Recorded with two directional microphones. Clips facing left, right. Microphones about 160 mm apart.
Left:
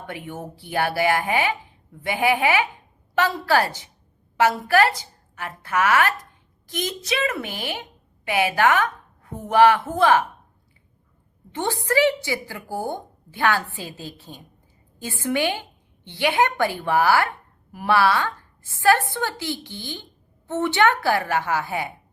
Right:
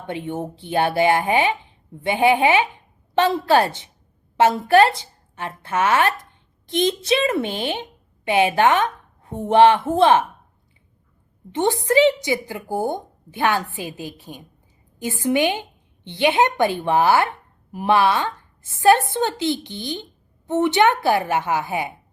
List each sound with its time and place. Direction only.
0.1 s a woman's voice: 25° right (ahead or behind)
11.5 s a woman's voice: 20° right (ahead or behind)